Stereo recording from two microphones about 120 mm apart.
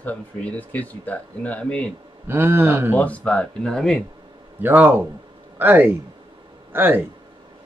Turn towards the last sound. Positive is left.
turn(degrees=-15)  # may be behind; listen again after turning